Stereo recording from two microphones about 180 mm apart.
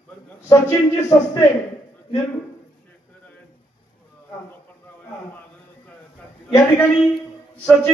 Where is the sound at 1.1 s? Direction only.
20° left (ahead or behind).